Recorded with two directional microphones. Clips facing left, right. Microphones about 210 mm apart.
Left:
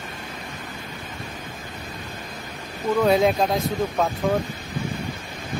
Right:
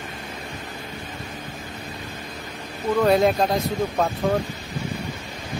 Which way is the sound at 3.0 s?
Centre (ahead or behind).